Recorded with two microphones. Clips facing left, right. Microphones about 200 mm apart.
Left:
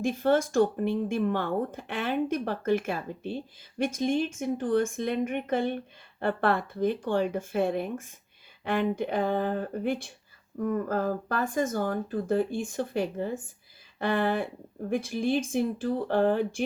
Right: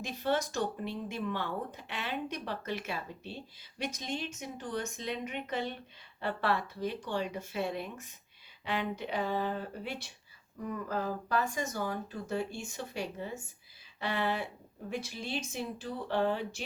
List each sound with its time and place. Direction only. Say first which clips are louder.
0.0 s speech: left 8 dB; 50° left (ahead or behind)